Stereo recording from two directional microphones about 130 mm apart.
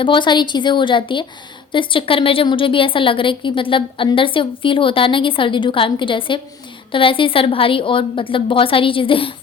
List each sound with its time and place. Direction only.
0.0 s a woman's voice: 35° left (ahead or behind)